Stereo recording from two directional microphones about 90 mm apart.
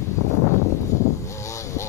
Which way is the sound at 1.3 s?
35° left (ahead or behind).